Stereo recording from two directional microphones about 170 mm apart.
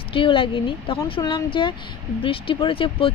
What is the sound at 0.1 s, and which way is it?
Speech, 30° left (ahead or behind).